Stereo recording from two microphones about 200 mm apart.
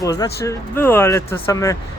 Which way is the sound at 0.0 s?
15° left (ahead or behind).